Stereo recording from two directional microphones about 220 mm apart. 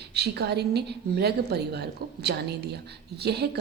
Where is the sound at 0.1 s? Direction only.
50° right (ahead or behind).